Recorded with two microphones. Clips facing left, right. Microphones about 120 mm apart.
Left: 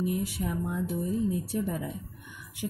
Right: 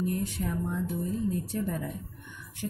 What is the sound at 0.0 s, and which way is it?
Speech, 10° left (ahead or behind).